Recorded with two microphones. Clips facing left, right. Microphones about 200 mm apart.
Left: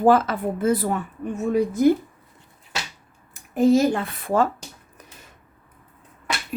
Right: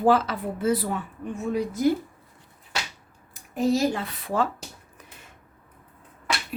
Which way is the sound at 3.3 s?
50° left (ahead or behind).